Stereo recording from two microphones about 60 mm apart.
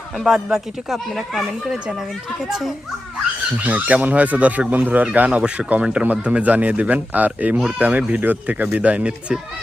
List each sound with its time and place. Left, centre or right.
0.2 s speech: centre
3.6 s a man's voice: right